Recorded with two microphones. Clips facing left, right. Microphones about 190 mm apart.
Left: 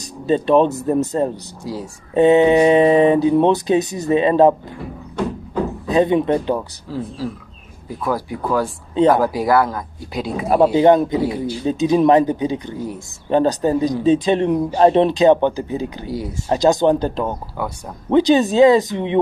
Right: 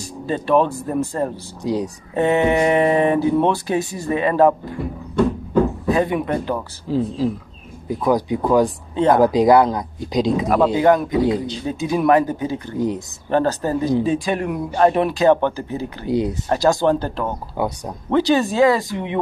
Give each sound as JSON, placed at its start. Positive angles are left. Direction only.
{"t": 0.0, "sound": "speech", "side_deg": 20}
{"t": 1.6, "sound": "speech", "side_deg": -20}
{"t": 2.1, "sound": "speech", "side_deg": 20}
{"t": 5.9, "sound": "speech", "side_deg": 20}
{"t": 6.9, "sound": "speech", "side_deg": -20}
{"t": 10.5, "sound": "speech", "side_deg": 25}
{"t": 11.2, "sound": "speech", "side_deg": -20}
{"t": 11.6, "sound": "speech", "side_deg": 20}
{"t": 16.1, "sound": "speech", "side_deg": -20}
{"t": 16.4, "sound": "speech", "side_deg": 20}
{"t": 17.6, "sound": "speech", "side_deg": -20}
{"t": 18.1, "sound": "speech", "side_deg": 20}